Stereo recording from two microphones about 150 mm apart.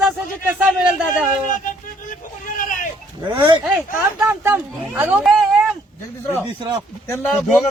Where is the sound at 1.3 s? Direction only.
60° left (ahead or behind).